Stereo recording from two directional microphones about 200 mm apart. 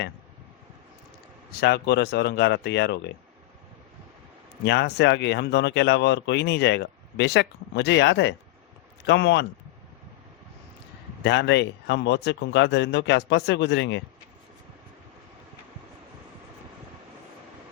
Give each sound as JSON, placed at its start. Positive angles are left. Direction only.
{"t": 1.5, "sound": "speech", "side_deg": 55}
{"t": 4.6, "sound": "speech", "side_deg": 60}
{"t": 11.2, "sound": "speech", "side_deg": 60}